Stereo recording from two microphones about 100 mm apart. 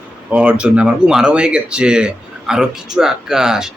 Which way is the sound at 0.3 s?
10° right (ahead or behind).